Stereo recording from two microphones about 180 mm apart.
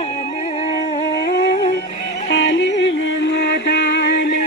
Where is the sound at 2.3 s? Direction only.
80° left.